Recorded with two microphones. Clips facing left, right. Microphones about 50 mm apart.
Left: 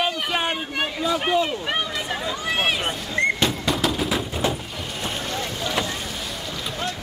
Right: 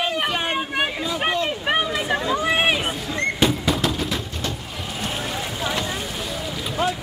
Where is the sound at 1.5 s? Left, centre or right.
Centre.